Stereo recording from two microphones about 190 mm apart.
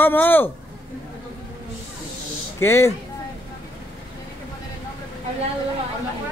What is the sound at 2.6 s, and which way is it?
Speech, 15° left (ahead or behind).